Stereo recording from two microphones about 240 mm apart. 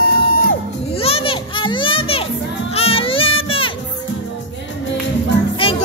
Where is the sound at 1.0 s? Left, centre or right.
Left.